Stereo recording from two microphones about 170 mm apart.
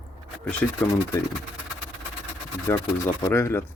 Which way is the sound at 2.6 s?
15° left (ahead or behind).